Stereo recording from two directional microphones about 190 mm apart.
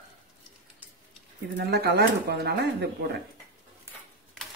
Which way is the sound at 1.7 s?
60° right (ahead or behind).